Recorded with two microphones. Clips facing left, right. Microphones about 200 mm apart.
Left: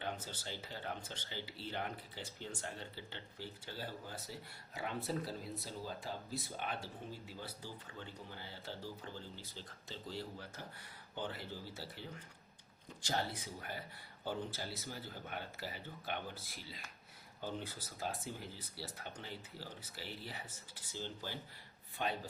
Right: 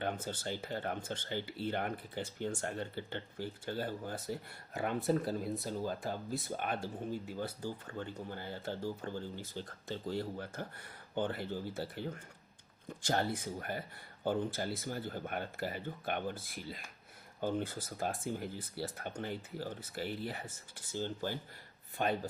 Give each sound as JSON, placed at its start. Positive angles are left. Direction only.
{"t": 0.0, "sound": "speech", "side_deg": -55}